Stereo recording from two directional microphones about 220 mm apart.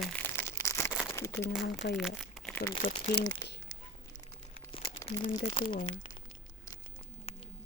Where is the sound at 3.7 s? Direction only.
15° left (ahead or behind).